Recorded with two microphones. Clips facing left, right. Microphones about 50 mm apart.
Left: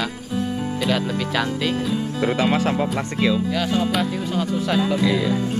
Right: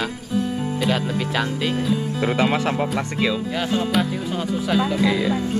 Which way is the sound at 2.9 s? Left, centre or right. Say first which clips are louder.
Left 1 dB; centre.